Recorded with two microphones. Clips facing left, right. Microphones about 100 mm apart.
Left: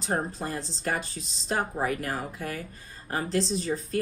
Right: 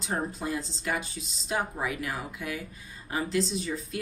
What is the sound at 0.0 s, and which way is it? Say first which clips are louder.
Speech: left 2 dB; 40° left (ahead or behind).